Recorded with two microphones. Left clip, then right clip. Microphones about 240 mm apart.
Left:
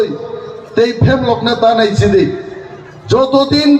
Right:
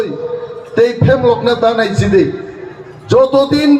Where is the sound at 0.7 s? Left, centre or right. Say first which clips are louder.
Right 1 dB; left.